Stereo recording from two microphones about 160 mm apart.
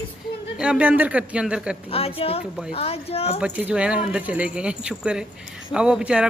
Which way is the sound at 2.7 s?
40° left (ahead or behind).